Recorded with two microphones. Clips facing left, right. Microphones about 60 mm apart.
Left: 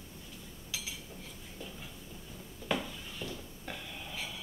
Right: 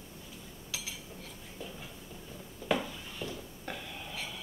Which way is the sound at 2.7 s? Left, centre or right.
Centre.